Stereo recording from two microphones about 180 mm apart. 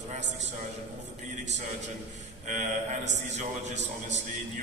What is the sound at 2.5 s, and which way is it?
Speech, 40° right (ahead or behind).